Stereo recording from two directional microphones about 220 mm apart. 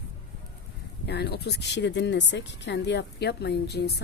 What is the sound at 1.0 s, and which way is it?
Speech, 50° left (ahead or behind).